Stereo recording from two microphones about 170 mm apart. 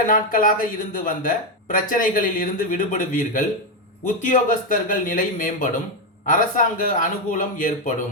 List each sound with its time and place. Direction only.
0.1 s speech: 50° left (ahead or behind)